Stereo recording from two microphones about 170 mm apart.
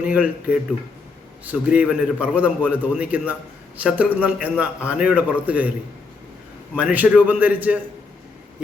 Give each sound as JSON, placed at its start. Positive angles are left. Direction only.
{"t": 0.0, "sound": "a man's voice", "side_deg": -10}
{"t": 1.5, "sound": "a man's voice", "side_deg": -5}
{"t": 6.7, "sound": "a man's voice", "side_deg": -10}